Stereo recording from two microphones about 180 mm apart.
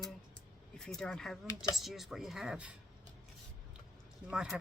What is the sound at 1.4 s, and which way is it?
Speech, 20° left (ahead or behind).